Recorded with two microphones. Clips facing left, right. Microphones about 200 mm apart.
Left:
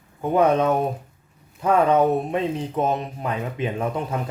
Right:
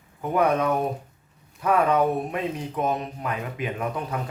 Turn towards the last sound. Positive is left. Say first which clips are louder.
# left 3 dB
turn(degrees=25)  # may be behind; listen again after turning